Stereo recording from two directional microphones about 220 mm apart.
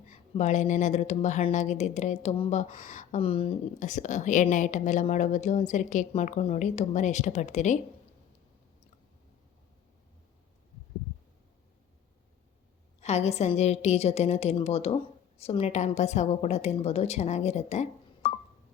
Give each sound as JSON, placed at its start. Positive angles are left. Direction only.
{"t": 0.1, "sound": "speech", "side_deg": 35}
{"t": 13.0, "sound": "a woman's voice", "side_deg": 30}